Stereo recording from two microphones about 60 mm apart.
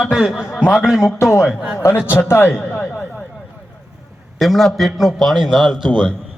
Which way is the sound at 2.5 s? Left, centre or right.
Left.